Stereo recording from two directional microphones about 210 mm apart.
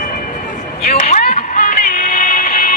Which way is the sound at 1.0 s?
40° left (ahead or behind).